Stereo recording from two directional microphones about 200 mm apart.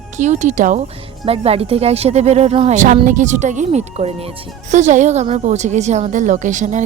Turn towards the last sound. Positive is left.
turn(degrees=-35)  # may be behind; listen again after turning